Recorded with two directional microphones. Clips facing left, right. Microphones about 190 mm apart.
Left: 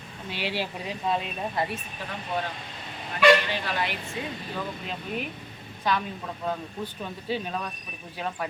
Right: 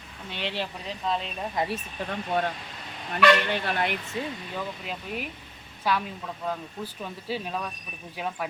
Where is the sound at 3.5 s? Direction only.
55° right (ahead or behind).